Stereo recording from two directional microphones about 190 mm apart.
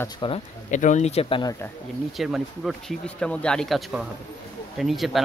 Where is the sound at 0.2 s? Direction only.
25° left (ahead or behind).